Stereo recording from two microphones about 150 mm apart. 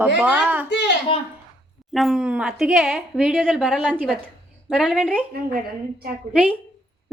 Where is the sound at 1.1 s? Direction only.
35° left (ahead or behind).